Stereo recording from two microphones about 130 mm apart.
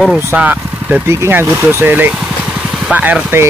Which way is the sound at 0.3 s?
10° right (ahead or behind).